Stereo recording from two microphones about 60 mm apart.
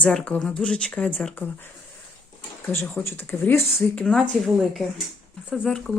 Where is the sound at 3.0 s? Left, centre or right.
Left.